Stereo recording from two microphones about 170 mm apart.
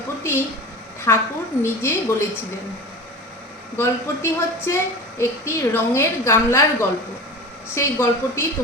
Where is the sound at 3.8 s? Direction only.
15° left (ahead or behind).